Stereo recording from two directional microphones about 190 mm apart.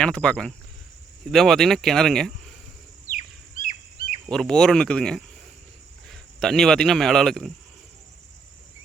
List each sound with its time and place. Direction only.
0.0 s speech: 5° left (ahead or behind)
3.1 s bird: 45° left (ahead or behind)
4.3 s speech: 5° left (ahead or behind)